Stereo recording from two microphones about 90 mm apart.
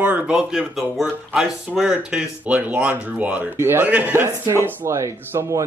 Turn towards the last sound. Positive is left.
turn(degrees=-30)  # may be behind; listen again after turning